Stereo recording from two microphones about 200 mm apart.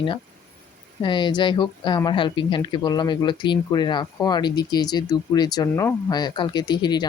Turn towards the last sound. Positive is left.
turn(degrees=20)  # may be behind; listen again after turning